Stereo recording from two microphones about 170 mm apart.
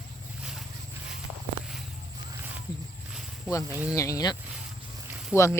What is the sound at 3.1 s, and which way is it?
Snake, 5° right (ahead or behind).